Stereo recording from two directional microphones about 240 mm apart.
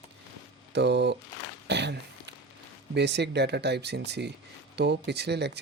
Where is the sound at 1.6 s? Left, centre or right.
Right.